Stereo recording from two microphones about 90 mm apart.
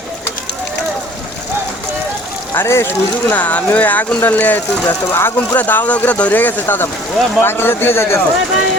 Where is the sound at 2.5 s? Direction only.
30° left (ahead or behind).